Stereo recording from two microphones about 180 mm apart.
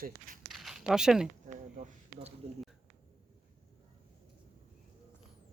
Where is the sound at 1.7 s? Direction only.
35° right (ahead or behind).